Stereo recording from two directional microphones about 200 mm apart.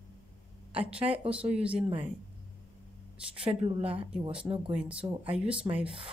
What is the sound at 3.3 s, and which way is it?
Speech, 25° right (ahead or behind).